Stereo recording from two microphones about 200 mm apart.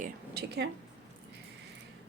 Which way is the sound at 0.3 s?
55° right (ahead or behind).